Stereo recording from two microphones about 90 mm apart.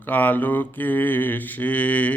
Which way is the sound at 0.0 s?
20° left (ahead or behind).